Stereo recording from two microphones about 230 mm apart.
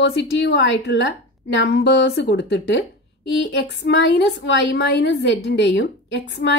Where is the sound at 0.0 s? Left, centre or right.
Left.